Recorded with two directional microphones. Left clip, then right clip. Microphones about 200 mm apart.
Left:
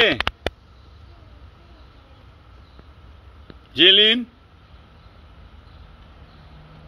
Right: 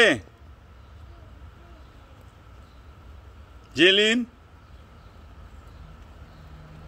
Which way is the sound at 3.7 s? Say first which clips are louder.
Left 5 dB; 10° right (ahead or behind).